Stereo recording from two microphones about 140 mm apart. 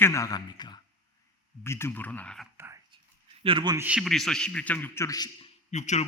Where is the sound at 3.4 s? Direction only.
35° right (ahead or behind).